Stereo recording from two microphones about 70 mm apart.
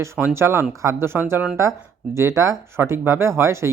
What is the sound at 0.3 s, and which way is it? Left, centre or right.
Speech, right.